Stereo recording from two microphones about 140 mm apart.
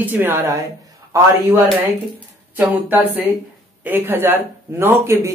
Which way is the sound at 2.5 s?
15° right (ahead or behind).